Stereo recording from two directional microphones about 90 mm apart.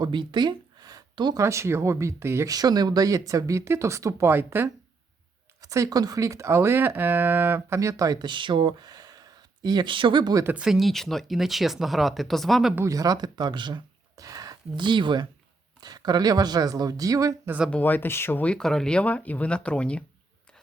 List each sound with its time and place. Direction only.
0.0 s a sound: 60° right (ahead or behind)
1.4 s speech: 35° right (ahead or behind)
2.5 s speech: 45° right (ahead or behind); by 4.7 s 25° right (ahead or behind)
5.6 s speech: 40° right (ahead or behind); by 7.8 s 25° right (ahead or behind)
7.8 s speech: 40° right (ahead or behind)
8.3 s speech: 65° right (ahead or behind)
10.4 s speech: 10° right (ahead or behind)
12.9 s speech: 40° right (ahead or behind); by 13.8 s 60° right (ahead or behind)
14.2 s speech: 45° right (ahead or behind); by 15.3 s 60° right (ahead or behind)
15.8 s speech: 50° right (ahead or behind)
17.7 s speech: 20° left (ahead or behind)
18.5 s speech: 5° left (ahead or behind)